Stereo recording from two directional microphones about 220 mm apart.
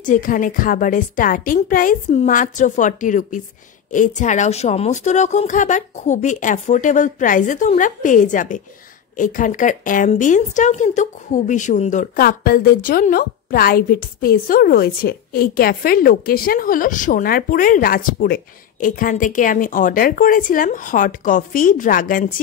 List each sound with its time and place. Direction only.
0.0 s a woman's voice: 35° left (ahead or behind)